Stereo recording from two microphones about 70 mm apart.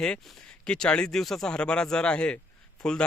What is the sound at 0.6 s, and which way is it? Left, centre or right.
A man's voice, centre.